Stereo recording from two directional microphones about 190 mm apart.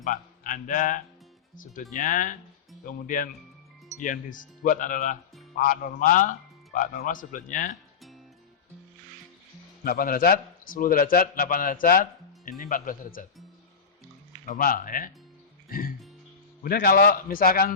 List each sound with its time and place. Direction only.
0.0 s a man's voice: 45° left (ahead or behind)
9.8 s a man's voice: 50° left (ahead or behind)
14.4 s a man's voice: 45° left (ahead or behind)
16.6 s a man's voice: 50° left (ahead or behind)